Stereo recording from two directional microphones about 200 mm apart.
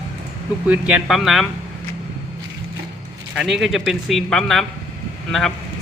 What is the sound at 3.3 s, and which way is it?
A man's voice, centre (ahead or behind).